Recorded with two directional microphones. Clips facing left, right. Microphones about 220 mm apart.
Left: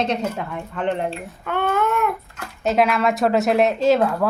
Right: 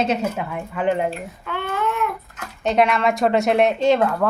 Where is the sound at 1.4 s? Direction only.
50° left (ahead or behind).